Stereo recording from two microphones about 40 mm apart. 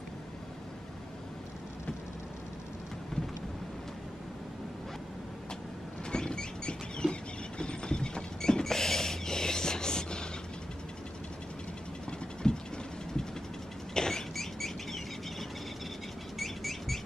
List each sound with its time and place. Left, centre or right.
6.0 s vehicle: centre
12.1 s vehicle: centre
13.9 s rodents: centre
16.3 s bird: centre